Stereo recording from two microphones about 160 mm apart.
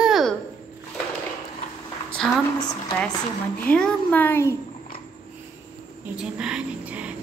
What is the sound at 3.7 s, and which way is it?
Speech, 5° left (ahead or behind).